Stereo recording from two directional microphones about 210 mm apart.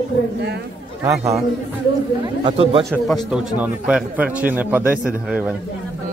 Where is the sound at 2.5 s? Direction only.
25° right (ahead or behind).